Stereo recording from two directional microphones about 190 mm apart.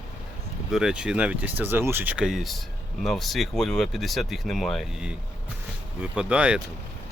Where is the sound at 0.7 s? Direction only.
5° right (ahead or behind).